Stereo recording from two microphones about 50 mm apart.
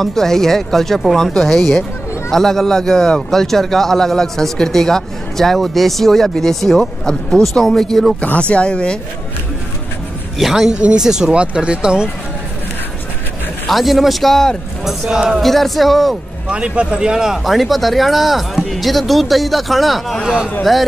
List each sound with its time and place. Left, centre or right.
0.0 s a man's voice: centre
8.4 s speech: left
10.4 s speech: centre
13.7 s speech: centre
14.9 s speech: centre
15.4 s speech: centre
16.4 s speech: right
17.5 s speech: centre
20.2 s speech: centre